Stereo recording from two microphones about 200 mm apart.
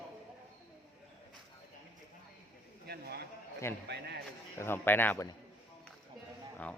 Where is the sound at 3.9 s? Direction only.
55° right (ahead or behind).